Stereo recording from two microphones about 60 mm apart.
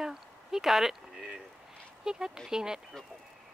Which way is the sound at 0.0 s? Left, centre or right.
Centre.